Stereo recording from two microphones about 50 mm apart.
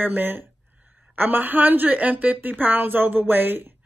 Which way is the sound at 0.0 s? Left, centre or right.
Right.